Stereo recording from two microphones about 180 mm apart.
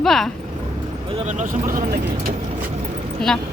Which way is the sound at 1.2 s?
45° right (ahead or behind).